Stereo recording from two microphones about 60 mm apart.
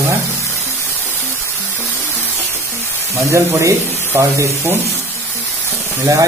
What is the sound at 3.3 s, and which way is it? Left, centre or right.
Speech, right.